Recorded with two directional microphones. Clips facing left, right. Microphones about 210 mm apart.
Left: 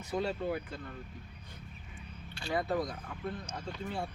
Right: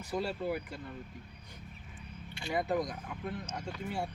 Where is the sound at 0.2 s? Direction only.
5° right (ahead or behind).